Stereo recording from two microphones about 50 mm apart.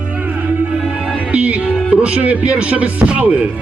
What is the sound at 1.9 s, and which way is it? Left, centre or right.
Speech, right.